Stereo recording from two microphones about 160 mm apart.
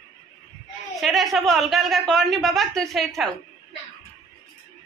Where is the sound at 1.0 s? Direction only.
Centre (ahead or behind).